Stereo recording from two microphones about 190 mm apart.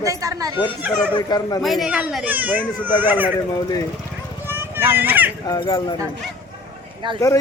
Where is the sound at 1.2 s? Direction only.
20° left (ahead or behind).